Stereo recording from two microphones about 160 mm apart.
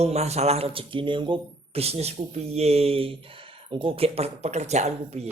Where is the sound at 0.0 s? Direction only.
40° right (ahead or behind).